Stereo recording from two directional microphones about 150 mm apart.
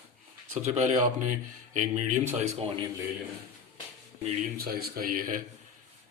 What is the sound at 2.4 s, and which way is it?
Speech, 40° right (ahead or behind).